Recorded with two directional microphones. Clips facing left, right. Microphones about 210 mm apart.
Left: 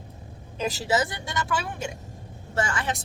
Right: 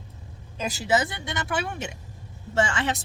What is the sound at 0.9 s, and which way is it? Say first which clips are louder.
Speech: right 3 dB; 20° right (ahead or behind).